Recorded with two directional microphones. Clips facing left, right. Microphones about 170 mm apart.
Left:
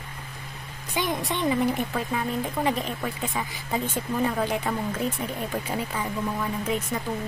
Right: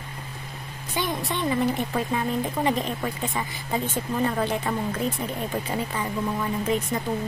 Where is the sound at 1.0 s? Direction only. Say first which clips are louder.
Even; 15° left (ahead or behind).